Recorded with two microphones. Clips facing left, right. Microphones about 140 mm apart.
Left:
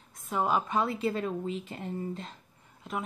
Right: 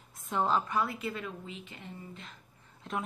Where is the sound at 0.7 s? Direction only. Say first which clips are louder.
Left 4 dB; 25° left (ahead or behind).